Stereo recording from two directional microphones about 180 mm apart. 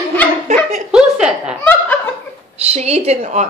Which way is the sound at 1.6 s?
10° left (ahead or behind).